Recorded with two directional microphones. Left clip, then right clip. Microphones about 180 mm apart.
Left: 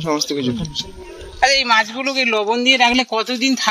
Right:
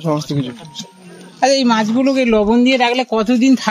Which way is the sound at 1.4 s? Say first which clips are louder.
Even; 35° left (ahead or behind).